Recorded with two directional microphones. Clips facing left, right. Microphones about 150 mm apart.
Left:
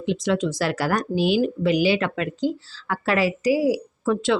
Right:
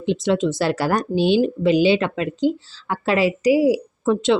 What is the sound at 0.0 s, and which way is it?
Speech, 25° right (ahead or behind).